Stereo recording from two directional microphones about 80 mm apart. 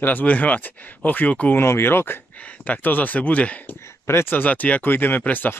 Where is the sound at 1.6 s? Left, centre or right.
Left.